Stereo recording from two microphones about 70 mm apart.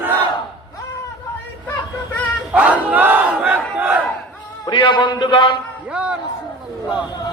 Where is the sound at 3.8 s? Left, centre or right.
Right.